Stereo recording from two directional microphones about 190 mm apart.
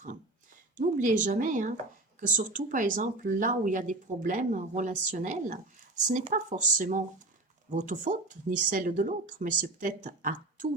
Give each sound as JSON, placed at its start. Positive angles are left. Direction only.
{"t": 0.8, "sound": "speech", "side_deg": -40}